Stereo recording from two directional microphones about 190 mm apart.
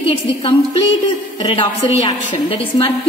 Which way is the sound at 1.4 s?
25° left (ahead or behind).